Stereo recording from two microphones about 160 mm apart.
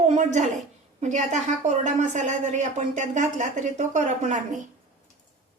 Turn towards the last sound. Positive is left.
turn(degrees=-45)  # may be behind; listen again after turning